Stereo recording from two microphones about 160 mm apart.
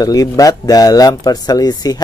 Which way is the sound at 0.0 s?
20° left (ahead or behind).